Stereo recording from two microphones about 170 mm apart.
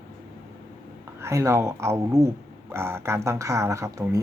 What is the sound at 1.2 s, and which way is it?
Speech, 15° right (ahead or behind).